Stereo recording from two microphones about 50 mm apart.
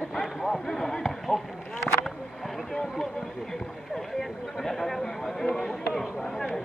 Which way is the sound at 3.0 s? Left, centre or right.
Centre.